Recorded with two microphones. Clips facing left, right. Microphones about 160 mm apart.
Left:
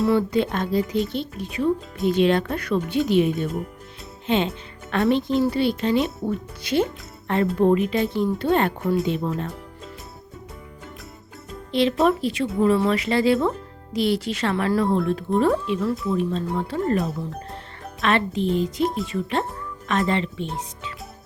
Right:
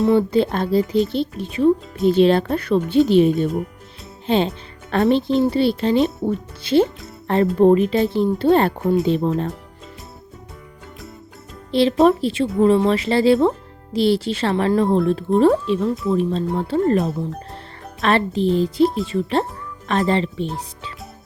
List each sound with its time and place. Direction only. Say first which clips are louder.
0.0 s a woman's voice: right 4 dB; 25° right (ahead or behind)
11.7 s a woman's voice: right 5 dB; 35° right (ahead or behind)
18.0 s a woman's voice: right 4 dB; 35° right (ahead or behind)